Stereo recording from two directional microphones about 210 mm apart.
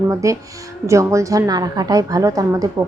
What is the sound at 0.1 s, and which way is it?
A woman's voice, 15° right (ahead or behind).